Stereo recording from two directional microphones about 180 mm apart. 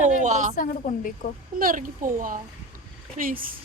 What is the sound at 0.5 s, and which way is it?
Speech, 45° left (ahead or behind).